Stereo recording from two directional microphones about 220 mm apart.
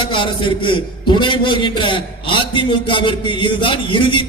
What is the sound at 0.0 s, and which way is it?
A man's voice, 20° left (ahead or behind).